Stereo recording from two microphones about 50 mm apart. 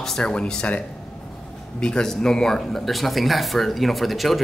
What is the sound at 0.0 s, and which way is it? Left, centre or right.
A man's voice, centre.